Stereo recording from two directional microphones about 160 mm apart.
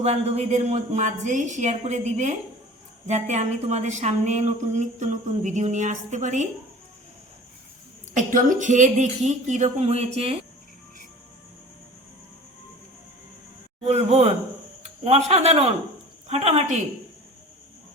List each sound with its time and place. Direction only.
0.0 s speech: 40° right (ahead or behind)
8.1 s speech: 55° right (ahead or behind)
13.8 s a man's voice: 40° right (ahead or behind)
14.8 s a sound: 40° right (ahead or behind)
15.3 s a man's voice: 40° right (ahead or behind)